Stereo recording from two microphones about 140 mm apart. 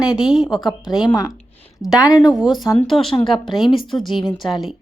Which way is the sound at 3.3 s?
35° left (ahead or behind).